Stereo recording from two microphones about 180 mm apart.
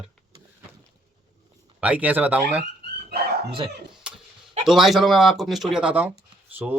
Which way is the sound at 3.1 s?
65° right (ahead or behind).